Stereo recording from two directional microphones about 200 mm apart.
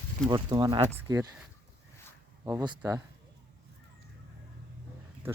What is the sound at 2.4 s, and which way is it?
Speech, 15° right (ahead or behind).